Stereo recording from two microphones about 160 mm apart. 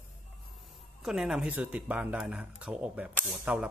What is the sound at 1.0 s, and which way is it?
Speech, 5° right (ahead or behind).